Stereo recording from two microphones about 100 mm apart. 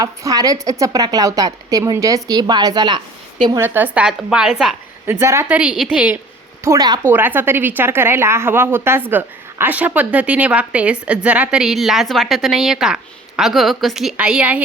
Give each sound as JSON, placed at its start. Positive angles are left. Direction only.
{"t": 0.0, "sound": "a woman's voice", "side_deg": -35}
{"t": 3.6, "sound": "speech", "side_deg": -20}
{"t": 5.0, "sound": "speech", "side_deg": -25}
{"t": 5.5, "sound": "speech", "side_deg": -10}
{"t": 6.7, "sound": "a woman's voice", "side_deg": -40}
{"t": 7.0, "sound": "speech", "side_deg": -20}